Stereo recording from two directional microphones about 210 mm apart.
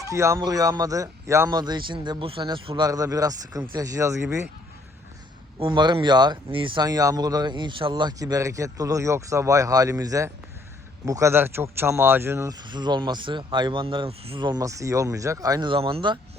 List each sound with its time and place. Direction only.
0.0 s speech: 15° right (ahead or behind)
5.5 s speech: 20° right (ahead or behind)